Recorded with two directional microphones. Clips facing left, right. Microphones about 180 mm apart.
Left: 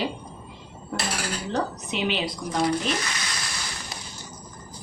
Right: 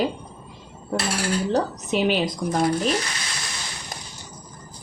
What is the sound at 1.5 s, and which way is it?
Speech, 45° right (ahead or behind).